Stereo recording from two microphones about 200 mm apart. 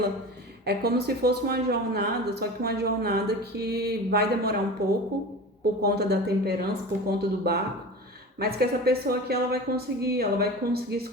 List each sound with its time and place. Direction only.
0.6 s speech: 55° right (ahead or behind)